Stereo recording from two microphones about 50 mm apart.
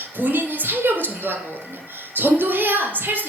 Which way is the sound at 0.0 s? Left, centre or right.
Right.